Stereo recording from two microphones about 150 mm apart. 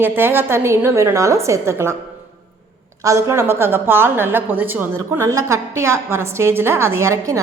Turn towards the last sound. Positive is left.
turn(degrees=-20)  # may be behind; listen again after turning